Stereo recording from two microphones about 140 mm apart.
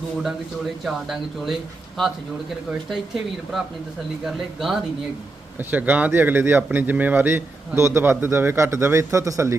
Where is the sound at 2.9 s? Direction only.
5° right (ahead or behind).